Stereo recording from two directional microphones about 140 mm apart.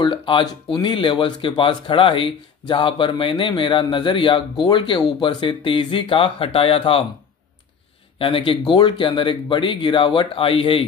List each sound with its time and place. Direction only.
0.0 s speech: 35° left (ahead or behind)
8.2 s speech: 40° left (ahead or behind)